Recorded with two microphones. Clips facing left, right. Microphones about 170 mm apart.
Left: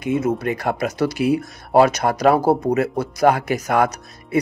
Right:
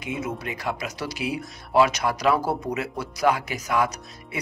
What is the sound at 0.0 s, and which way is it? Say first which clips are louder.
Speech: left 10 dB; 50° left (ahead or behind).